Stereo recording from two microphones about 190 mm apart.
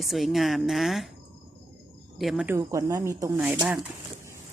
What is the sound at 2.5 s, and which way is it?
Speech, 15° right (ahead or behind).